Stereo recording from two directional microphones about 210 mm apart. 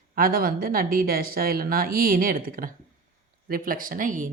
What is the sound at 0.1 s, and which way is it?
A woman's voice, 45° right (ahead or behind).